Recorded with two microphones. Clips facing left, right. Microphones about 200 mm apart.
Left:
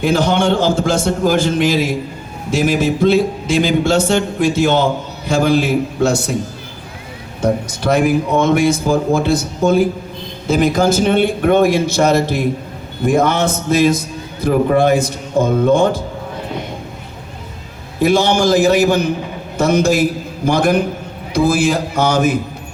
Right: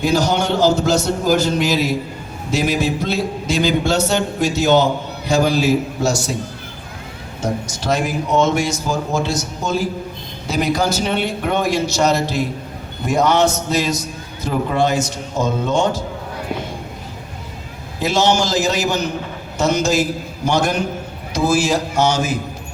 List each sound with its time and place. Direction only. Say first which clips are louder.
0.0 s speech: left 3 dB; 55° left (ahead or behind)
7.4 s a man's voice: left 5 dB; 60° left (ahead or behind)
18.0 s a man's voice: left 4 dB; 55° left (ahead or behind)